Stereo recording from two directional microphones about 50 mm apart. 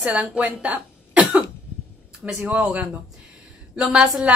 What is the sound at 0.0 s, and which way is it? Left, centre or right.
A woman's voice, right.